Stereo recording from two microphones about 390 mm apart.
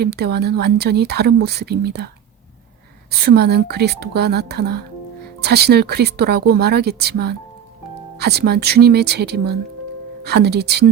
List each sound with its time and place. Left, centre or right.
0.0 s a woman's voice: right
3.1 s a woman's voice: right